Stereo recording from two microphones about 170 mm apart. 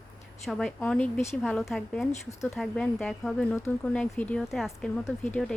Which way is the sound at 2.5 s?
5° left (ahead or behind).